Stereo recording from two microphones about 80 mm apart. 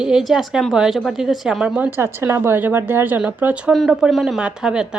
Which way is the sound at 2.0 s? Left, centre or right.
Right.